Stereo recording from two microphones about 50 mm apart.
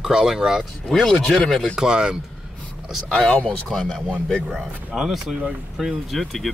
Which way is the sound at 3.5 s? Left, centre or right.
Centre.